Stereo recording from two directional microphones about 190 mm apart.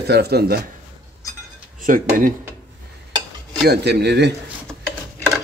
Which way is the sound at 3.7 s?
60° right (ahead or behind).